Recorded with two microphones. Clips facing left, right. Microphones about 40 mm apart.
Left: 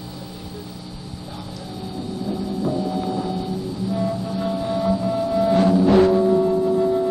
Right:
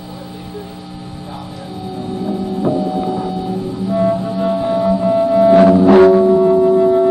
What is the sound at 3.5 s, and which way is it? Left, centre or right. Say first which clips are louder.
Music: right 6 dB; right.